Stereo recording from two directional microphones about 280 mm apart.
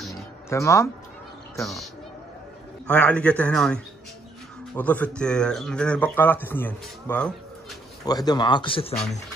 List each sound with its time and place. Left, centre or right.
0.0 s music: centre
0.6 s speech: centre
2.9 s speech: centre